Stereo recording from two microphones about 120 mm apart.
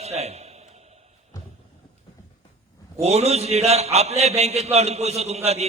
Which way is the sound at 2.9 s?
60° right (ahead or behind).